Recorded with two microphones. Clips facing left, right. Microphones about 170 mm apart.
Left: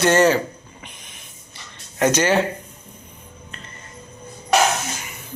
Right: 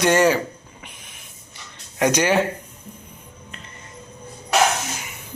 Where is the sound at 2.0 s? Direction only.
10° right (ahead or behind).